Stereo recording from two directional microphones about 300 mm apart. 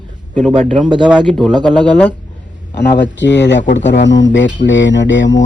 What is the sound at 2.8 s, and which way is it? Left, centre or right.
Speech, left.